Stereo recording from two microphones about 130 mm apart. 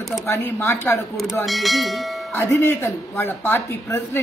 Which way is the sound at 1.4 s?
Centre (ahead or behind).